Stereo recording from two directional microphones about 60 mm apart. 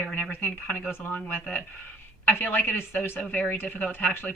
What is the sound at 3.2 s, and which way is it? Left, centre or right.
Speech, left.